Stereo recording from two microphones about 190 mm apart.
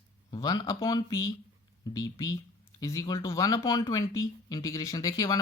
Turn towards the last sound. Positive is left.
turn(degrees=20)  # may be behind; listen again after turning